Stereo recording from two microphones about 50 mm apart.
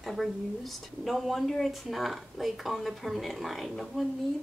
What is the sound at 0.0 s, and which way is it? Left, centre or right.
Speech, centre.